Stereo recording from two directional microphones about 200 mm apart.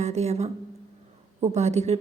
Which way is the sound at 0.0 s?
35° right (ahead or behind).